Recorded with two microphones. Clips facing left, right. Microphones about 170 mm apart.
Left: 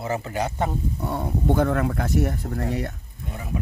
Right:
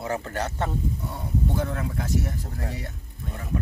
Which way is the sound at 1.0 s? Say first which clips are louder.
Left 4 dB; 65° left (ahead or behind).